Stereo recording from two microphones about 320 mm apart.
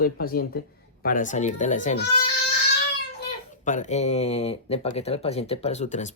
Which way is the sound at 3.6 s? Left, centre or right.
Left.